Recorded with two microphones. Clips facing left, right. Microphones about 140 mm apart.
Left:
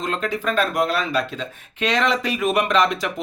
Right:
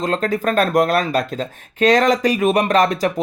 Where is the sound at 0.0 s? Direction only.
40° right (ahead or behind).